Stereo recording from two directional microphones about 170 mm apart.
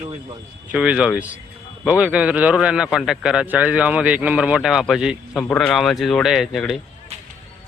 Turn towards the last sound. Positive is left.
turn(degrees=0)  # may be behind; listen again after turning